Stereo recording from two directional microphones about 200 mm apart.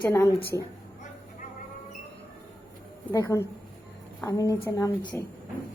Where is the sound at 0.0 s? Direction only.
10° left (ahead or behind).